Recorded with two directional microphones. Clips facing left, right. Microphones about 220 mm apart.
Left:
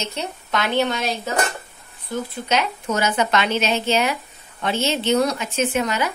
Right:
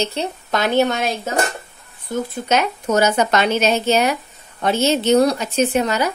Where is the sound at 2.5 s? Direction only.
45° right (ahead or behind).